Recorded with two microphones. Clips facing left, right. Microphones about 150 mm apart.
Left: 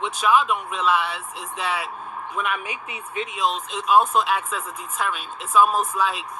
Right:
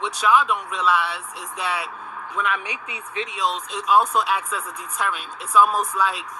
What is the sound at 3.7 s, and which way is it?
Speech, 20° left (ahead or behind).